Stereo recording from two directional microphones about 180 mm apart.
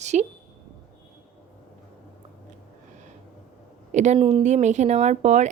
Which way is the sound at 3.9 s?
40° right (ahead or behind).